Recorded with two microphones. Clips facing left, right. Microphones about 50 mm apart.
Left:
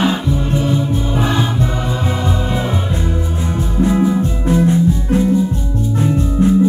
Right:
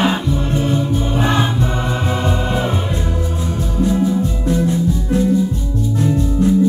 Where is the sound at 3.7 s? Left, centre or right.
Left.